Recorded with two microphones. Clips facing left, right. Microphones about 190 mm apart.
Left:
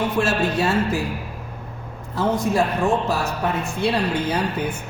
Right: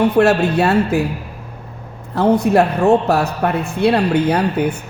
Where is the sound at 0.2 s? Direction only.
65° right (ahead or behind).